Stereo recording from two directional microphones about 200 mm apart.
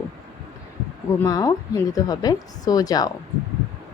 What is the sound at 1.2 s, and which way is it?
A woman's voice, 15° left (ahead or behind).